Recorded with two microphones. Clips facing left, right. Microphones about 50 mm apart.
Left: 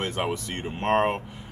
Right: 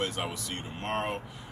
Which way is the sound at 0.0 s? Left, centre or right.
Left.